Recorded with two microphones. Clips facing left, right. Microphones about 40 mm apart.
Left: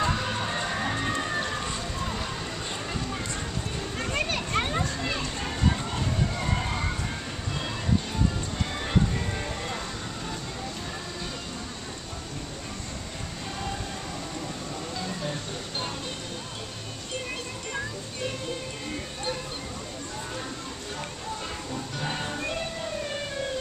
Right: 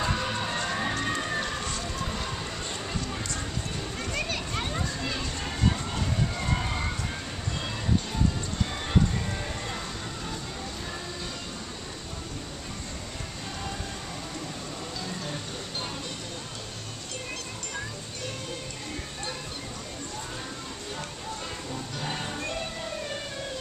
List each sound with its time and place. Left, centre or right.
0.0 s music: centre
2.0 s a sound: centre
4.0 s children playing: left
5.0 s music: centre
15.0 s a sound: centre
21.7 s music: centre